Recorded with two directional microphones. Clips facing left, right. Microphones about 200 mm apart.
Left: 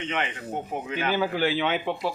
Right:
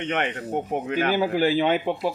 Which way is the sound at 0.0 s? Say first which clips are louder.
Right 4 dB; 60° right (ahead or behind).